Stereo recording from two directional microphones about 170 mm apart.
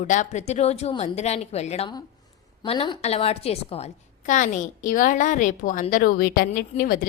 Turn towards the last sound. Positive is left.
turn(degrees=55)  # may be behind; listen again after turning